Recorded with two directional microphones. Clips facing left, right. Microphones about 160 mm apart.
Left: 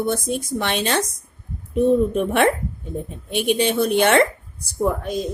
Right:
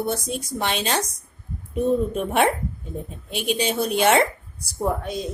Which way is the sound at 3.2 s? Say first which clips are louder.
Left 4 dB; 55° left (ahead or behind).